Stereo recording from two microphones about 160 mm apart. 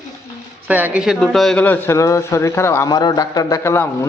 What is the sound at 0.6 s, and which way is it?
A man's voice, 10° right (ahead or behind).